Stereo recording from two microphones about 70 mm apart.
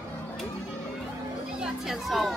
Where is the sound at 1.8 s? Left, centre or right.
Centre.